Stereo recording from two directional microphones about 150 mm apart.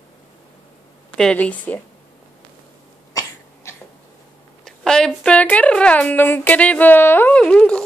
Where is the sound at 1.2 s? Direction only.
5° left (ahead or behind).